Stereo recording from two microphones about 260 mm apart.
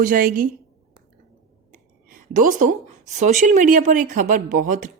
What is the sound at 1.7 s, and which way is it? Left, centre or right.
A woman's voice, right.